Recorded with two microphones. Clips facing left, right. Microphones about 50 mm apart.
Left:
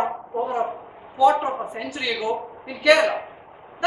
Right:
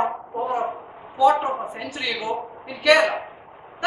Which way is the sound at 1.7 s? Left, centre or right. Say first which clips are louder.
Left 1 dB; centre.